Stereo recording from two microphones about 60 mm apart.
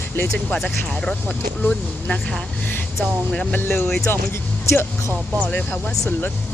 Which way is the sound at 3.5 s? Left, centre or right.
Left.